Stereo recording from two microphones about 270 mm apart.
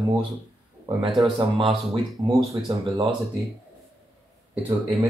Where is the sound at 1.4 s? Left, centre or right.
Centre.